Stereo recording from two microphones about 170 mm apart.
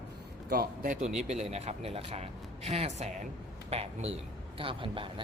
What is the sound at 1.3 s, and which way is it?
A man's voice, 40° right (ahead or behind).